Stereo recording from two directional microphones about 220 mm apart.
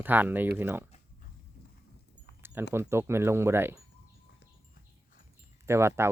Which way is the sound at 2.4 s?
10° right (ahead or behind).